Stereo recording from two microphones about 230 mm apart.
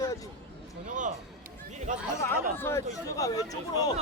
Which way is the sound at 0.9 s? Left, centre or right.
Right.